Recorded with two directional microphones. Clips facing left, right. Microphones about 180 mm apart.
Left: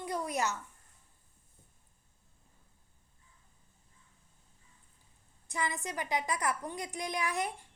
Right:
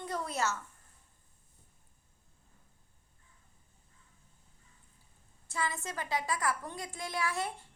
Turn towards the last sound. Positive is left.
turn(degrees=15)  # may be behind; listen again after turning